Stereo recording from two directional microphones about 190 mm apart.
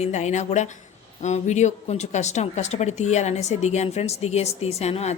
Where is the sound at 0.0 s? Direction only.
35° left (ahead or behind).